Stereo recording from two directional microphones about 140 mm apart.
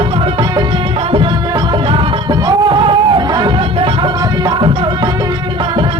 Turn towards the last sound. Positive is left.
turn(degrees=-35)  # may be behind; listen again after turning